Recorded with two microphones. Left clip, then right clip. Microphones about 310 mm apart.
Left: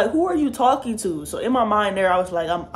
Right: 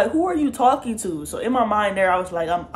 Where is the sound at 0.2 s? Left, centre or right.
Centre.